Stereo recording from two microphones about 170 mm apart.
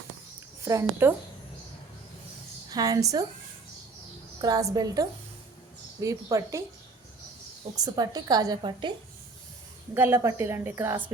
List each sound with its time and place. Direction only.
0.6 s a woman's voice: 15° right (ahead or behind)
2.6 s a woman's voice: 20° right (ahead or behind)
4.4 s a woman's voice: 20° right (ahead or behind)
7.8 s a woman's voice: 25° right (ahead or behind)
9.9 s a woman's voice: 15° right (ahead or behind)